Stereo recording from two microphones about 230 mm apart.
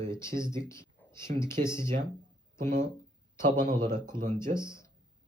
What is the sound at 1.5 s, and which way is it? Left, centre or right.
Speech, centre.